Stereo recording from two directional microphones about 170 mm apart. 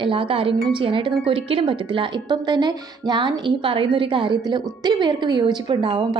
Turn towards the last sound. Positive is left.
turn(degrees=-30)  # may be behind; listen again after turning